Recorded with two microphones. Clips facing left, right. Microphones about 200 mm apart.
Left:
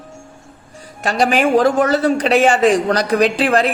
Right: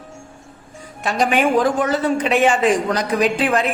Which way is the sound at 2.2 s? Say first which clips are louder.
Left 3 dB; 80° left.